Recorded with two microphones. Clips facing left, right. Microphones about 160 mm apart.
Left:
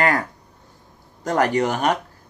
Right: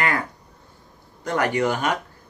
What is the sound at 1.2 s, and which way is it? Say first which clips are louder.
Speech: left 2 dB; 40° left (ahead or behind).